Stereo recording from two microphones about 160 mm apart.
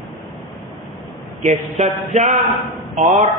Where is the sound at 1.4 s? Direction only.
45° right (ahead or behind).